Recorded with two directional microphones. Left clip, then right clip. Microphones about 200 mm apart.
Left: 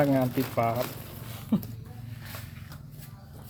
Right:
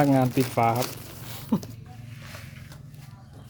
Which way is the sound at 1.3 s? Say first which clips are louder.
Right 2 dB; 45° right (ahead or behind).